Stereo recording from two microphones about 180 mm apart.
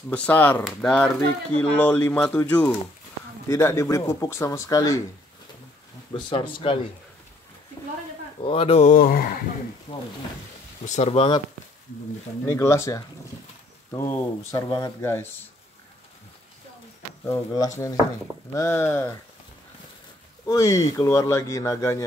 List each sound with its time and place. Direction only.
0.1 s speech: 10° left (ahead or behind)
6.1 s speech: 30° left (ahead or behind)
8.4 s speech: 30° left (ahead or behind)
8.9 s speech: 50° left (ahead or behind)
9.9 s speech: 30° left (ahead or behind)
12.4 s speech: 15° left (ahead or behind)
17.3 s speech: 20° left (ahead or behind)
20.4 s speech: 20° left (ahead or behind)